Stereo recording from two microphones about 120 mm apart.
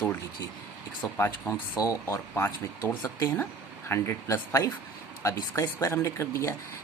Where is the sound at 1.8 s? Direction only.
25° left (ahead or behind).